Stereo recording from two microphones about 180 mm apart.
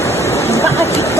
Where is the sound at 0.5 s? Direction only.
15° left (ahead or behind).